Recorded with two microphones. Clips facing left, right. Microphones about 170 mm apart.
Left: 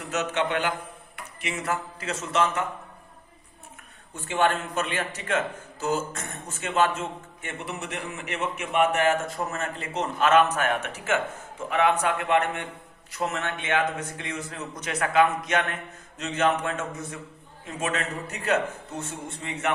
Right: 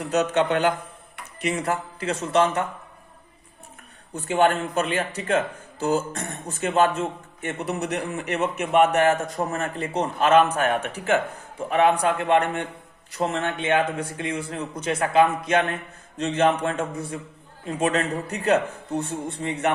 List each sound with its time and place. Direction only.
0.1 s a man's voice: 35° right (ahead or behind)
4.1 s a man's voice: 40° right (ahead or behind)